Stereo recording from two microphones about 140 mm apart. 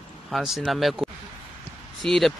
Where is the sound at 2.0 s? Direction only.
Centre (ahead or behind).